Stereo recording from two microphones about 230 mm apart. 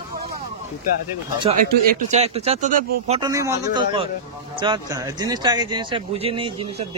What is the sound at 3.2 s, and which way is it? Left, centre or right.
A man's voice, centre.